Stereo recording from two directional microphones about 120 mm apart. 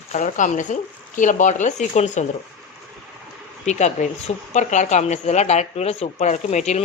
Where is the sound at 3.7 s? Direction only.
75° left (ahead or behind).